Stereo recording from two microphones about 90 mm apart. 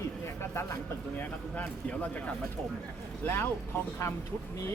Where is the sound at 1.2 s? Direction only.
20° left (ahead or behind).